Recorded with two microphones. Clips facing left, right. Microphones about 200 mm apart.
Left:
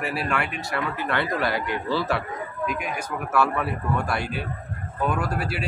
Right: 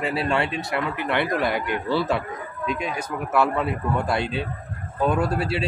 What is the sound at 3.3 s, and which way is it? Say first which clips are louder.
A man's voice: right 2 dB; 20° right (ahead or behind).